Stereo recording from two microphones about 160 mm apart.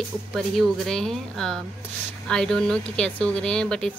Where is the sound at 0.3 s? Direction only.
Centre (ahead or behind).